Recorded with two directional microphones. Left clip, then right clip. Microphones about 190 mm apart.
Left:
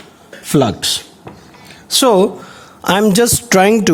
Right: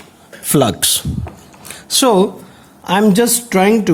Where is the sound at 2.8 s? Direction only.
40° left (ahead or behind).